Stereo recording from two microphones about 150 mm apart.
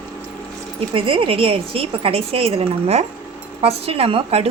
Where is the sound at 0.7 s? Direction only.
35° right (ahead or behind).